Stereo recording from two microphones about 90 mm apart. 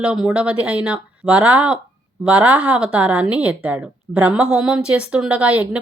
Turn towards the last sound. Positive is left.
turn(degrees=-15)  # may be behind; listen again after turning